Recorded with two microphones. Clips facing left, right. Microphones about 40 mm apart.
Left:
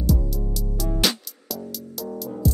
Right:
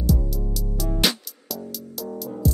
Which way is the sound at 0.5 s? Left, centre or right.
Centre.